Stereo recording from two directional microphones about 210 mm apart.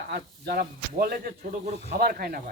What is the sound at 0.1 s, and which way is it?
Speech, 45° right (ahead or behind).